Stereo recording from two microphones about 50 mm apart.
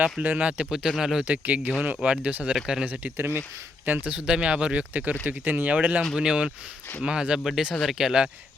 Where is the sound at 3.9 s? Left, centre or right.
Right.